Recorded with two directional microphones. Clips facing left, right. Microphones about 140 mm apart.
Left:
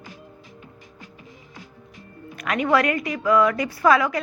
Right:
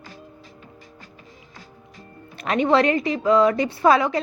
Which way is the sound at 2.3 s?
30° right (ahead or behind).